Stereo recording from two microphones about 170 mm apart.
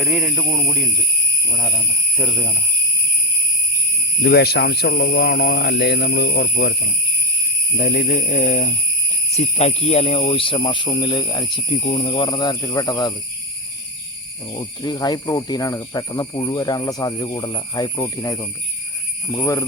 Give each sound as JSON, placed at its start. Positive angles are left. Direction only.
{"t": 0.0, "sound": "speech", "side_deg": -5}
{"t": 4.2, "sound": "speech", "side_deg": 70}
{"t": 7.8, "sound": "jingle bell", "side_deg": 55}
{"t": 9.3, "sound": "speech", "side_deg": 40}
{"t": 14.5, "sound": "speech", "side_deg": 25}